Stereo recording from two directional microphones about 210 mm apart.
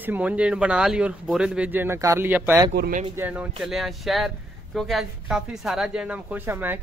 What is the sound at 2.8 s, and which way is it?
Speech, 40° right (ahead or behind).